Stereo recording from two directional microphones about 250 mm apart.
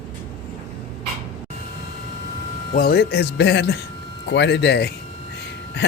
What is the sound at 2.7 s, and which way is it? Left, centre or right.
Speech, left.